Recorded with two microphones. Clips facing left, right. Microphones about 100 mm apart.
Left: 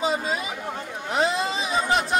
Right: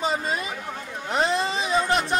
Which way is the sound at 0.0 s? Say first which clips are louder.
Left 1 dB; centre (ahead or behind).